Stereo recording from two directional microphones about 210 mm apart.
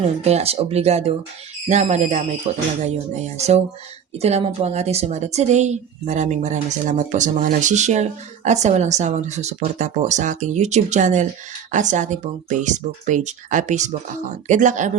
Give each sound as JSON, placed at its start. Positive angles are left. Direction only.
{"t": 0.2, "sound": "a woman's voice", "side_deg": -30}